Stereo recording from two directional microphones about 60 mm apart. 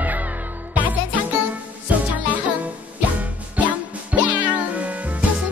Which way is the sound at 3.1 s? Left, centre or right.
Right.